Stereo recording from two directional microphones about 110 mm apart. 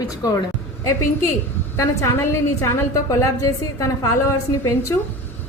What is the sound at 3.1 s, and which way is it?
Speech, 30° left (ahead or behind).